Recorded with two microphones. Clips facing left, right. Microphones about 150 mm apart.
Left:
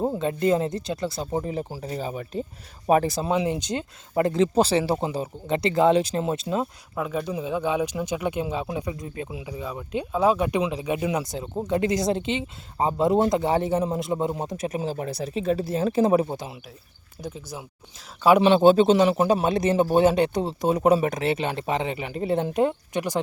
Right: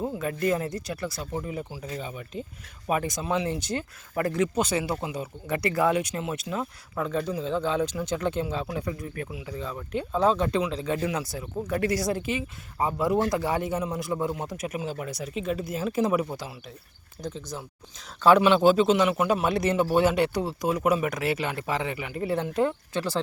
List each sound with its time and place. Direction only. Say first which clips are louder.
0.2 s speech: left 2 dB; 25° left (ahead or behind)
1.3 s speech: left 6 dB; 45° left (ahead or behind)
1.5 s speech: left 4 dB; 30° left (ahead or behind)
3.3 s speech: even; 20° left (ahead or behind)
6.9 s speech: even; 10° left (ahead or behind); by 16.5 s 30° left (ahead or behind)
17.2 s speech: even; 10° left (ahead or behind)
18.4 s speech: left 3 dB; 30° left (ahead or behind)